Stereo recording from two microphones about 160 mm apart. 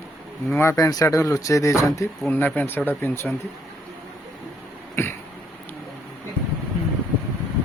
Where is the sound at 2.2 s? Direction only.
10° left (ahead or behind).